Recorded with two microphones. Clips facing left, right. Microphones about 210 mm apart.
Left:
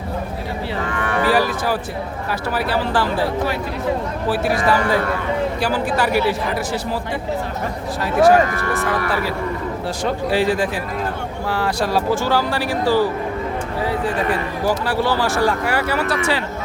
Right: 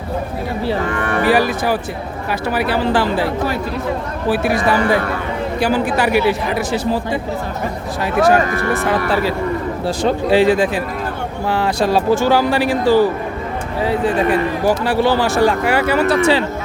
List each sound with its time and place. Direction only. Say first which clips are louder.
1.2 s speech: right 3 dB; 20° right (ahead or behind)
4.3 s speech: right 3 dB; 20° right (ahead or behind)
8.3 s speech: even; 25° right (ahead or behind)